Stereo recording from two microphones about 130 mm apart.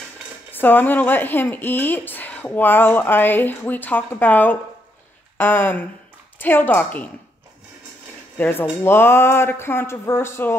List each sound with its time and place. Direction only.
0.5 s speech: 15° left (ahead or behind)
8.4 s speech: 15° left (ahead or behind)